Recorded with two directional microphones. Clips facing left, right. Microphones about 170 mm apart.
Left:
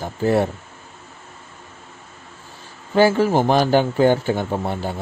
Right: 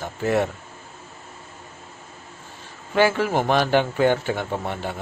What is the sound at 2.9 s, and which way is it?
A man's voice, 35° left (ahead or behind).